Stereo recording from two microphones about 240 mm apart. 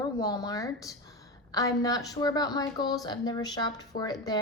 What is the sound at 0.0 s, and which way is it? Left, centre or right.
A woman's voice, centre.